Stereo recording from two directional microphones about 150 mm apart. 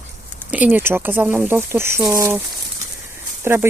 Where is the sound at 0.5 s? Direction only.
10° right (ahead or behind).